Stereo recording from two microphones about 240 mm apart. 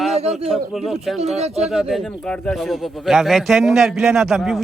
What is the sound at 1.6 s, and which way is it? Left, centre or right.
A man's voice, centre.